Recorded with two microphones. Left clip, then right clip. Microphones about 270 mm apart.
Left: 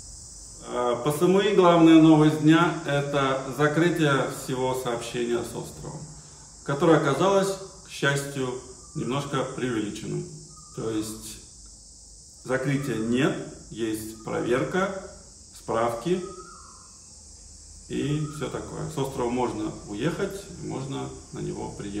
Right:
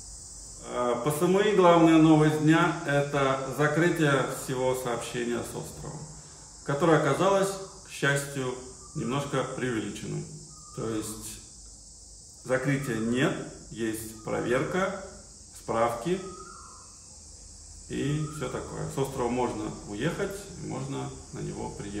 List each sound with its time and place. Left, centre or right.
0.6 s a man's voice: centre
12.4 s a man's voice: centre
17.8 s a man's voice: centre